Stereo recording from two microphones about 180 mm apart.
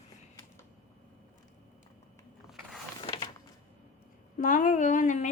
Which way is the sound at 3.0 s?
30° left (ahead or behind).